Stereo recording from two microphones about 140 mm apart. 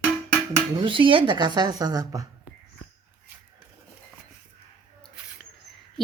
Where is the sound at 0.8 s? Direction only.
40° right (ahead or behind).